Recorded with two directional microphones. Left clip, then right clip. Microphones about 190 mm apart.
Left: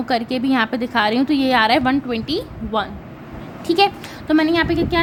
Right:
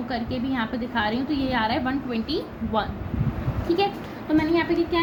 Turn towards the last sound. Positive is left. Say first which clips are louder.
# left 5 dB
turn(degrees=70)  # may be behind; listen again after turning